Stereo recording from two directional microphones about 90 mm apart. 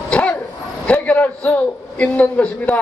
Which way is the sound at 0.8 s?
15° left (ahead or behind).